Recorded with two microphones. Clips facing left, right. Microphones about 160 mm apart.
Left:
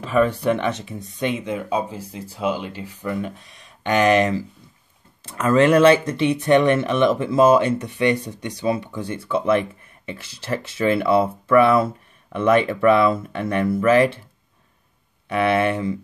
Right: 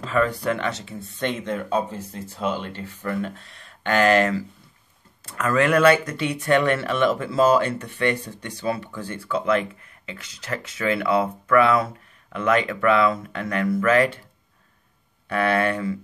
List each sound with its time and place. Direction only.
0.0 s speech: 15° left (ahead or behind)
15.2 s speech: 20° left (ahead or behind)